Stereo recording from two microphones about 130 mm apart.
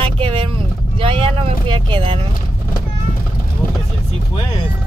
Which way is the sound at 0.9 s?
45° right (ahead or behind).